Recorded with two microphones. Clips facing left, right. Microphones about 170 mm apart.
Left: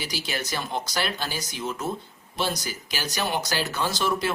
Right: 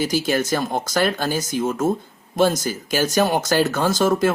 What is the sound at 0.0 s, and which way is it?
Speech, 50° right (ahead or behind).